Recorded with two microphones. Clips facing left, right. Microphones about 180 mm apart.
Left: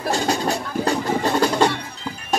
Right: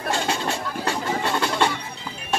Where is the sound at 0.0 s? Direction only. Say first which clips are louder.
Left 4 dB; 40° left (ahead or behind).